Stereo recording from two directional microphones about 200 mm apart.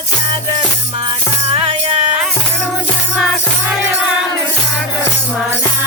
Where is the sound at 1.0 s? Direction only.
25° right (ahead or behind).